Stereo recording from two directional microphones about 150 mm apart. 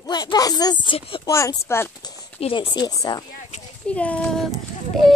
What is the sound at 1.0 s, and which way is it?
Speech, 35° left (ahead or behind).